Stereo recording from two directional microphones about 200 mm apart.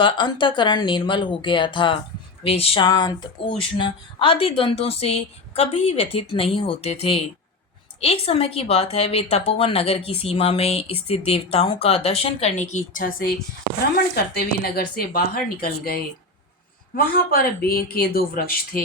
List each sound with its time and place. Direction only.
0.0 s a woman's voice: 25° left (ahead or behind); by 18.8 s 45° left (ahead or behind)